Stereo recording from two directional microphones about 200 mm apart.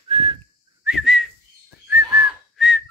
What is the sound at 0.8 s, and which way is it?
Whistling, centre (ahead or behind).